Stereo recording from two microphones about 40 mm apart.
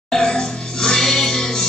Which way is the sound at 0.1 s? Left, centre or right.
Centre.